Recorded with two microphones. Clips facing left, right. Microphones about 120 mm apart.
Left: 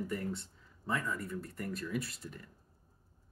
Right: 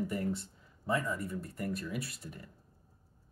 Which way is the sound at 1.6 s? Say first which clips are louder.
Even; 10° right (ahead or behind).